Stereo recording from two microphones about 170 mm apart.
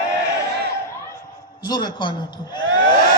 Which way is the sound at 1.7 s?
25° left (ahead or behind).